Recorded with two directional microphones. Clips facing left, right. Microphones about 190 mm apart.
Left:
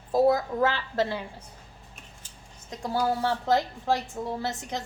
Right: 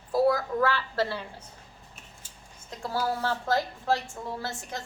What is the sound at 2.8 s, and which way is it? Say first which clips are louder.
A woman's voice: left 3 dB; 15° left (ahead or behind).